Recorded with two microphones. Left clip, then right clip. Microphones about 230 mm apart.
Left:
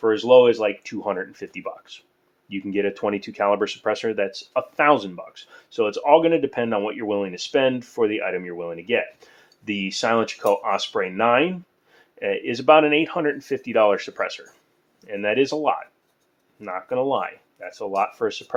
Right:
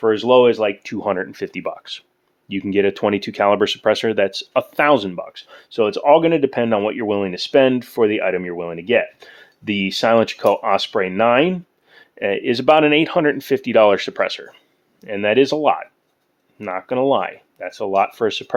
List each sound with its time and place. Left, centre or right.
0.0 s speech: right